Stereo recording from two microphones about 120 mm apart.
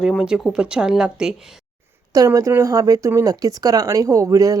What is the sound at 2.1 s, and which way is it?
Speech, 25° right (ahead or behind).